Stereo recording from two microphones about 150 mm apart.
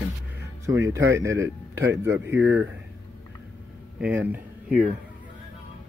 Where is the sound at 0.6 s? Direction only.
20° right (ahead or behind).